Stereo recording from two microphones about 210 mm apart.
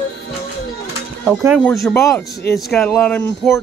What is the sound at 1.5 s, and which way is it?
Speech, 10° left (ahead or behind).